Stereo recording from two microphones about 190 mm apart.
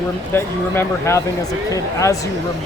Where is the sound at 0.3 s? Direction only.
15° left (ahead or behind).